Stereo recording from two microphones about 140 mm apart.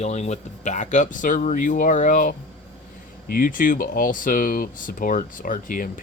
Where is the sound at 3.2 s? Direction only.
85° left.